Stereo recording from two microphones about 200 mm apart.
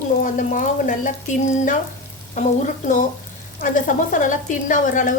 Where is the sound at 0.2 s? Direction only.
40° left (ahead or behind).